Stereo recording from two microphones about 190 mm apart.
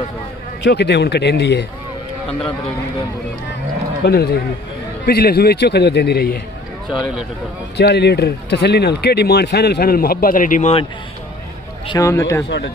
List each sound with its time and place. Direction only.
0.7 s speech: 65° left (ahead or behind)
4.0 s speech: 55° left (ahead or behind)
7.7 s speech: 60° left (ahead or behind); by 10.9 s 35° left (ahead or behind)
11.9 s speech: 15° left (ahead or behind)
12.4 s speech: 60° left (ahead or behind)